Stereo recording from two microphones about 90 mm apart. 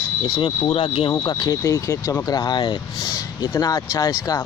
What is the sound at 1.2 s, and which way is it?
Speech, 50° left (ahead or behind).